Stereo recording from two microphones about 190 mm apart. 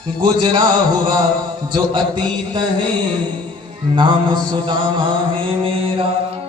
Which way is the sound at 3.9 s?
25° right (ahead or behind).